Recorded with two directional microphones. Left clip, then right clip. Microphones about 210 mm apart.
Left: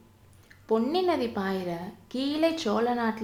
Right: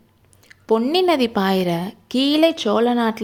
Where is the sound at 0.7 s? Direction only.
35° right (ahead or behind).